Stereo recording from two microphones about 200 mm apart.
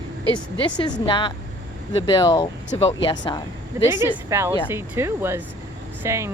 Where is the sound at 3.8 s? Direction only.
15° right (ahead or behind).